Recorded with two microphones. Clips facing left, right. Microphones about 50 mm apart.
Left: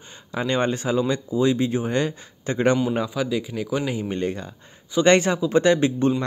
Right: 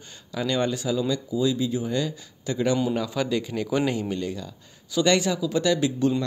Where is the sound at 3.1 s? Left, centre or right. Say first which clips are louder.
Left 1 dB; centre.